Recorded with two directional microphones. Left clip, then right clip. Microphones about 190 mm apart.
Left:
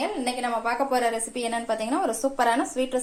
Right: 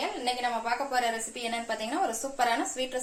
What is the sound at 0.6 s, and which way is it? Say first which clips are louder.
A woman's voice: left 5 dB; 45° left (ahead or behind).